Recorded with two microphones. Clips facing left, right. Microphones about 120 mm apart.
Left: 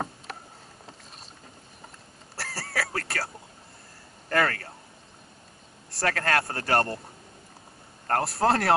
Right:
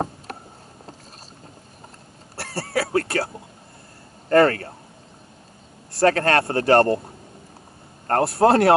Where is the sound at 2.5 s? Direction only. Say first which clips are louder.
Right 10 dB; 25° right (ahead or behind).